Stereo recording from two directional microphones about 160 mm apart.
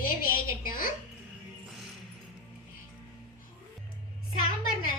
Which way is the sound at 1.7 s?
5° right (ahead or behind).